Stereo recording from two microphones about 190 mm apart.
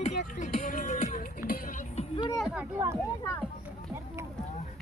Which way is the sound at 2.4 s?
5° right (ahead or behind).